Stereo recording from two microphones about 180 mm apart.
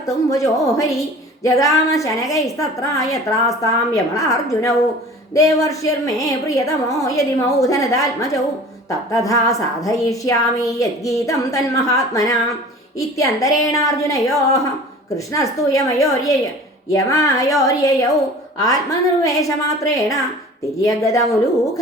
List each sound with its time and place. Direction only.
0.0 s a woman's voice: 20° left (ahead or behind)